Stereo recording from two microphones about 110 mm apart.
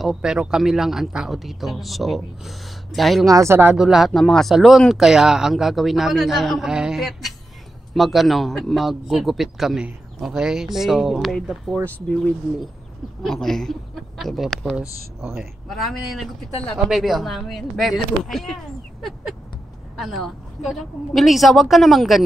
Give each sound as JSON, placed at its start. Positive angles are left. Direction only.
{"t": 0.0, "sound": "speech", "side_deg": -5}
{"t": 3.3, "sound": "speech", "side_deg": -25}
{"t": 3.6, "sound": "speech", "side_deg": -5}
{"t": 13.2, "sound": "speech", "side_deg": 0}
{"t": 20.0, "sound": "speech", "side_deg": 0}